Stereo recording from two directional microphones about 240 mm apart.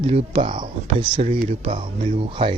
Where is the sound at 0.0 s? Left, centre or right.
Right.